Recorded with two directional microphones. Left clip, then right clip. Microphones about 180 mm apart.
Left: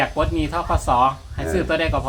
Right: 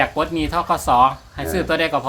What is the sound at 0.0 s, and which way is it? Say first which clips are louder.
Speech: right 2 dB; 45° right (ahead or behind).